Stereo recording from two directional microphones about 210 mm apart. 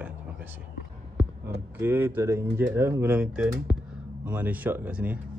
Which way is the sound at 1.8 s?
10° right (ahead or behind).